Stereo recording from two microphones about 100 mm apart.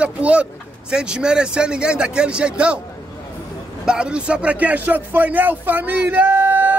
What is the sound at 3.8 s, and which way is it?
Speech, 10° right (ahead or behind).